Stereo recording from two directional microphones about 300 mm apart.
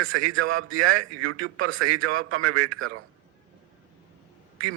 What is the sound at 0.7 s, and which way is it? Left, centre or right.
A man's voice, right.